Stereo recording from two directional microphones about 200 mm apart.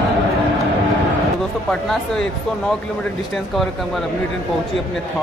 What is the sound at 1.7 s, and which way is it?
Speech, 5° left (ahead or behind).